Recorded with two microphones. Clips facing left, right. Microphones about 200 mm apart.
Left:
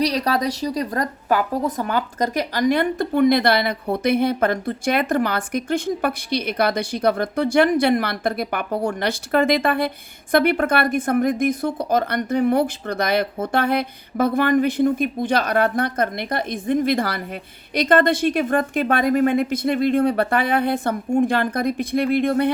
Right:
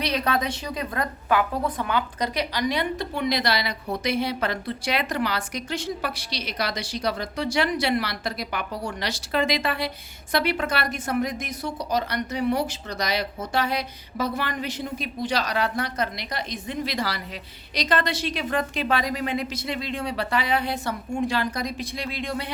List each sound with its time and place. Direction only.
0.0 s a woman's voice: 35° left (ahead or behind); by 22.4 s 55° left (ahead or behind)